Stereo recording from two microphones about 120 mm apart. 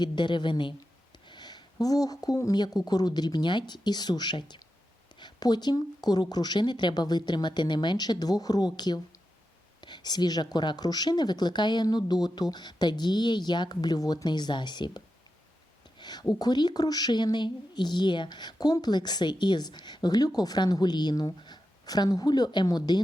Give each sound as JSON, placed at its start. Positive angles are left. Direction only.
{"t": 0.0, "sound": "speech", "side_deg": 40}
{"t": 16.0, "sound": "a sound", "side_deg": 35}
{"t": 16.3, "sound": "speech", "side_deg": 35}